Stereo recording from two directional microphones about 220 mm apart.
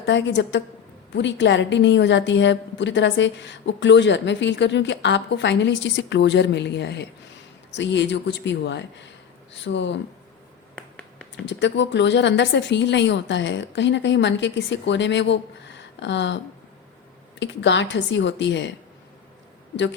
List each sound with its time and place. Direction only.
0.0 s a woman's voice: 55° left (ahead or behind)
10.8 s finger snapping: 5° left (ahead or behind)
11.4 s a woman's voice: 55° left (ahead or behind)
17.4 s speech: 55° left (ahead or behind)